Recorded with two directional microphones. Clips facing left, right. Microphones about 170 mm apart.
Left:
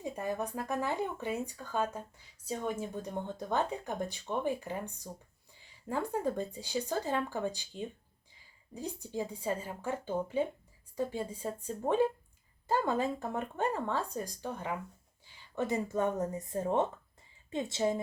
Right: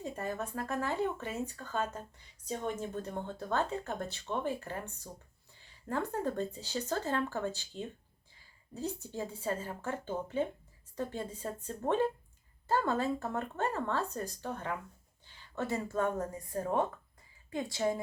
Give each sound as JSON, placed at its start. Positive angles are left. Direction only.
{"t": 0.0, "sound": "speech", "side_deg": 15}